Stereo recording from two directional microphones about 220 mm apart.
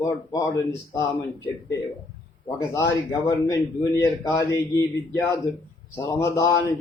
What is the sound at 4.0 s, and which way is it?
Speech, 15° left (ahead or behind).